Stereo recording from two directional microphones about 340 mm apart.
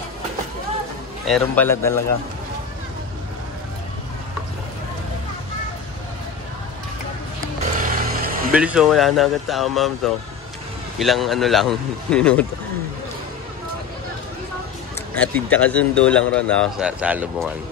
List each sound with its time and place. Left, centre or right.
1.2 s a man's voice: centre
7.8 s music: right
8.5 s a man's voice: centre
15.1 s a man's voice: centre